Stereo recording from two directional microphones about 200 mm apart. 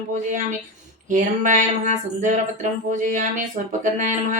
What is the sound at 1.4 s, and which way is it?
Speech, 40° right (ahead or behind).